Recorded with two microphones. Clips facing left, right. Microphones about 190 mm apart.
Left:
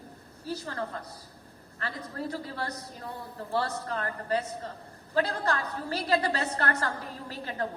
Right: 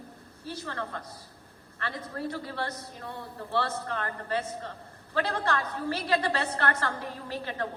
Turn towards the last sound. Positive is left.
turn(degrees=40)  # may be behind; listen again after turning